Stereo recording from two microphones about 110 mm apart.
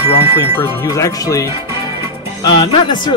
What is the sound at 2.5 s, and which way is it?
Speech, 45° left (ahead or behind).